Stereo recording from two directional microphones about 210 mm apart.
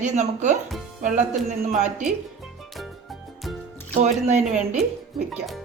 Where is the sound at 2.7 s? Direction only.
Centre (ahead or behind).